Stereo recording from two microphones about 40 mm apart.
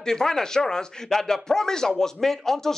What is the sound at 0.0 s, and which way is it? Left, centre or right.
Speech, centre.